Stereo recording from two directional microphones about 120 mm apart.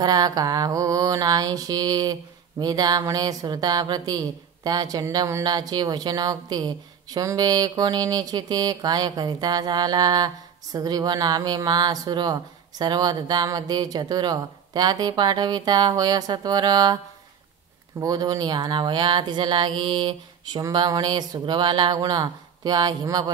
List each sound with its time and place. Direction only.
0.0 s speech: 30° right (ahead or behind)
18.0 s speech: 30° right (ahead or behind)